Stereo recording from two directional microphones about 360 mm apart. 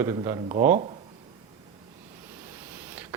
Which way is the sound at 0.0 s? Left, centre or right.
Centre.